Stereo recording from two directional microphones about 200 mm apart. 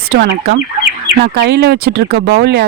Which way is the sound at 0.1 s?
55° right (ahead or behind).